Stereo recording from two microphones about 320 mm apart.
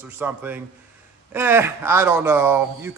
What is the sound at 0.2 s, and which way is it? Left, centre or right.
A man's voice, centre.